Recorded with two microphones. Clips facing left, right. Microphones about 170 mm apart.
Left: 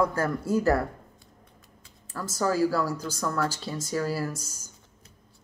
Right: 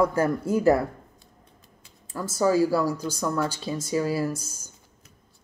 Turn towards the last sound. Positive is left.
turn(degrees=-15)  # may be behind; listen again after turning